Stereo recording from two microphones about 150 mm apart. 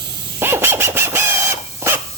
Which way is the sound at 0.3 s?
15° right (ahead or behind).